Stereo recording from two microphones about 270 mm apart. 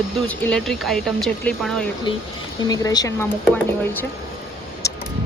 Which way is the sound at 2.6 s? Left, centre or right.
Centre.